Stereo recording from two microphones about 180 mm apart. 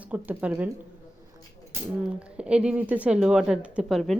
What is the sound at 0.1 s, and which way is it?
Speech, 10° right (ahead or behind).